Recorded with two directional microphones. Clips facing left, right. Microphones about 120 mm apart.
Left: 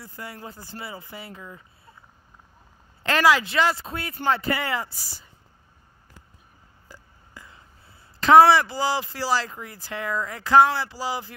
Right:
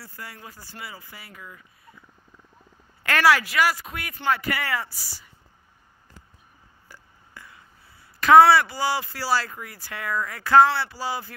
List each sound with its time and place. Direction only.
0.0 s speech: 20° left (ahead or behind)
3.0 s speech: 20° left (ahead or behind)
6.9 s a sound: 20° left (ahead or behind)
8.2 s speech: 25° left (ahead or behind)